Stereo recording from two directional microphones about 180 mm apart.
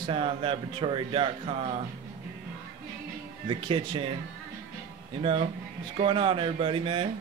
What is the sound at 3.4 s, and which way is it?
Speech, 30° right (ahead or behind).